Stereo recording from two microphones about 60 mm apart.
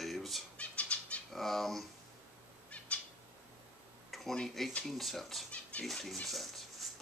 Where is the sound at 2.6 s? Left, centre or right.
Left.